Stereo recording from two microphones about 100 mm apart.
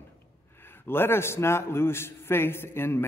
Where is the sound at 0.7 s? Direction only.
20° left (ahead or behind).